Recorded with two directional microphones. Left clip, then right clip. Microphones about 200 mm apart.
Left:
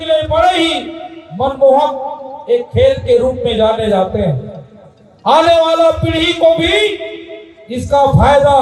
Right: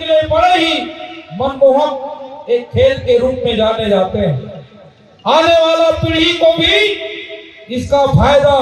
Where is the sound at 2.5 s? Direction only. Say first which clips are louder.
Left 1 dB; 45° right (ahead or behind).